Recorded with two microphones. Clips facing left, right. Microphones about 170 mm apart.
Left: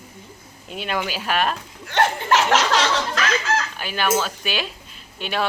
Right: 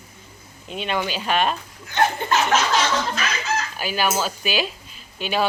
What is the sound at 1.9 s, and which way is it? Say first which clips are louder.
Chuckle: left 1 dB; 85° left.